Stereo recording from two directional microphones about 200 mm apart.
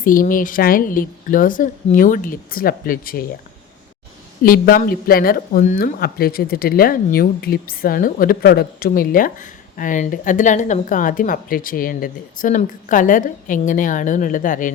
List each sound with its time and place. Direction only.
0.0 s speech: 45° left (ahead or behind)
4.4 s speech: 45° left (ahead or behind)